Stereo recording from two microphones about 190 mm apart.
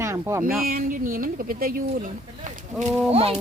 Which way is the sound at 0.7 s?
45° right (ahead or behind).